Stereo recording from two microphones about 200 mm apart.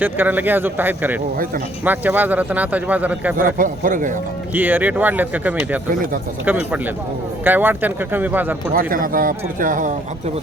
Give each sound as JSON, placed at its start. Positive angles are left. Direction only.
{"t": 0.0, "sound": "a man's voice", "side_deg": -10}
{"t": 3.3, "sound": "speech", "side_deg": -45}
{"t": 4.5, "sound": "a man's voice", "side_deg": -10}
{"t": 8.7, "sound": "speech", "side_deg": -45}